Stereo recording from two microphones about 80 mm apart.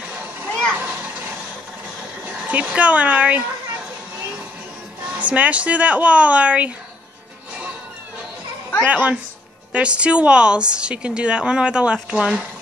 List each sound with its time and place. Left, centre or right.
0.0 s children playing: right
0.7 s a sound: right
2.2 s speech: centre
5.1 s a woman's voice: centre
8.8 s a woman's voice: centre